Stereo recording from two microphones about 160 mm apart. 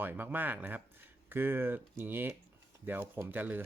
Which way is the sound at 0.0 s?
10° right (ahead or behind).